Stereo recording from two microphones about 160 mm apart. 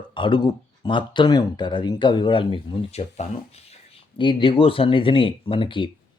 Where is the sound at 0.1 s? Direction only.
30° left (ahead or behind).